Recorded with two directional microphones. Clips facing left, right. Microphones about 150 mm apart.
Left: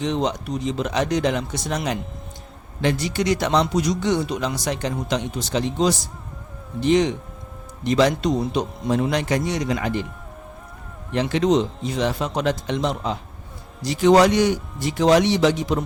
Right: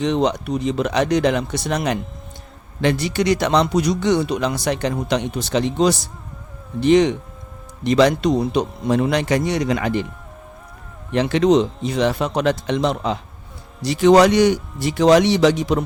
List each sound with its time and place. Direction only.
0.0 s speech: 65° right (ahead or behind)
11.1 s speech: 70° right (ahead or behind)